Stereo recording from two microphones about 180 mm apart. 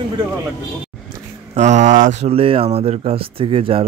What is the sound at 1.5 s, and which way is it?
Speech, 40° right (ahead or behind).